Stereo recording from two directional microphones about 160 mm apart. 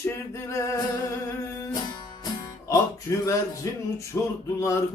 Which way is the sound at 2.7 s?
20° left (ahead or behind).